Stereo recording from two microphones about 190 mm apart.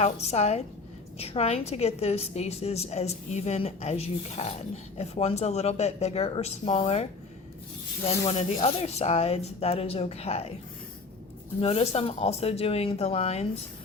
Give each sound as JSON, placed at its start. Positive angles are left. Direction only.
{"t": 0.0, "sound": "a woman's voice", "side_deg": 35}
{"t": 11.6, "sound": "a woman's voice", "side_deg": 30}